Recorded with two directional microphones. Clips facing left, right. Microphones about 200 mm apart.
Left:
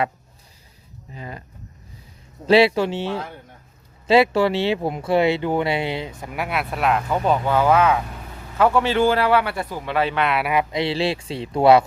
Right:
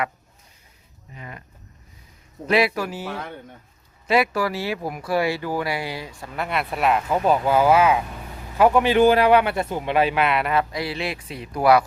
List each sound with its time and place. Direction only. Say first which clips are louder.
1.1 s speech: left 4 dB; 30° left (ahead or behind)
2.5 s a man's voice: left 5 dB; 30° left (ahead or behind); by 10.2 s 10° right (ahead or behind)
10.2 s speech: even; 5° left (ahead or behind)
10.5 s speech: left 2 dB; 20° left (ahead or behind)